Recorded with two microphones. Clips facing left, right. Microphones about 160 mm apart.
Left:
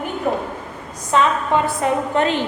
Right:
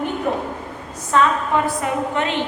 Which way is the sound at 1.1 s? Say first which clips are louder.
Even; 20° left (ahead or behind).